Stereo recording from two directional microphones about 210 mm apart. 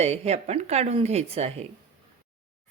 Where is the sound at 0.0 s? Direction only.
30° right (ahead or behind).